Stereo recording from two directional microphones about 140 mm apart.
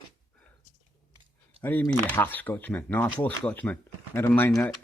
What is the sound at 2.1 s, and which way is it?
Speech, 15° left (ahead or behind).